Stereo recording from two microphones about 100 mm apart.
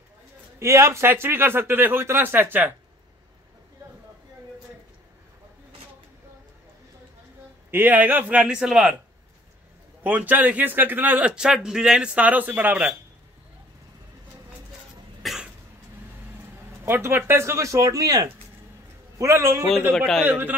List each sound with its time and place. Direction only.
0.6 s speech: 30° right (ahead or behind)
7.7 s a man's voice: 20° right (ahead or behind)
10.0 s a man's voice: 15° right (ahead or behind)
15.2 s cough: 5° right (ahead or behind)
16.8 s speech: 25° right (ahead or behind)
19.1 s speech: 30° right (ahead or behind)
19.6 s a man's voice: centre (ahead or behind)
20.2 s a man's voice: 20° right (ahead or behind)